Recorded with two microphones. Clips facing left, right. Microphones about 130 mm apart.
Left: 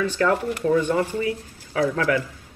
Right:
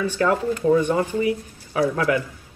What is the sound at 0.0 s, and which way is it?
A man's voice, 15° right (ahead or behind).